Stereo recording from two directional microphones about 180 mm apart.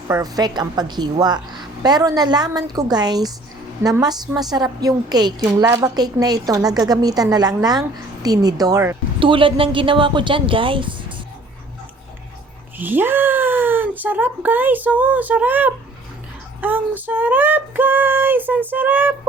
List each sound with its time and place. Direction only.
0.1 s a woman's voice: 20° right (ahead or behind)
9.2 s a woman's voice: 30° right (ahead or behind)
12.8 s speech: 10° right (ahead or behind)